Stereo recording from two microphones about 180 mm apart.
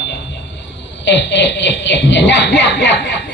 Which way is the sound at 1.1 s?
80° left.